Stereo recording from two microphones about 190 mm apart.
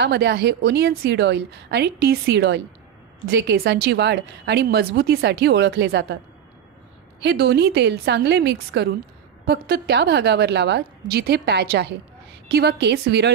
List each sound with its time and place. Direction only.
0.0 s a woman's voice: 65° right (ahead or behind)
7.2 s a woman's voice: 65° right (ahead or behind)